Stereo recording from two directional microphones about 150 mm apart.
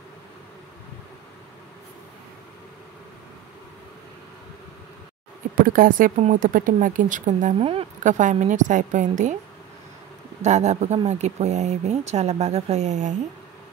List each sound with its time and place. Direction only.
5.6 s a woman's voice: 70° right (ahead or behind); by 9.4 s 55° right (ahead or behind)
10.4 s speech: 50° right (ahead or behind)